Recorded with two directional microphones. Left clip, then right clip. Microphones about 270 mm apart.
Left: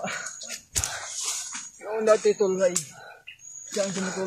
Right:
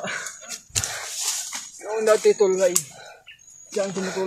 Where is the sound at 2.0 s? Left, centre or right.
Right.